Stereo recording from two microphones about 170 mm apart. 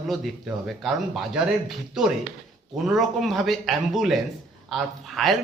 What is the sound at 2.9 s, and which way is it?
A man's voice, centre (ahead or behind).